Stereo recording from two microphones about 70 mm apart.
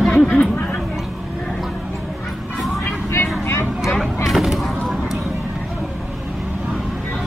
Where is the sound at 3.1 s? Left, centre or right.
Left.